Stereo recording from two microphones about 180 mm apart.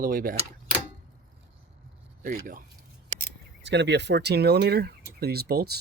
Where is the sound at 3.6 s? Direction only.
75° right (ahead or behind).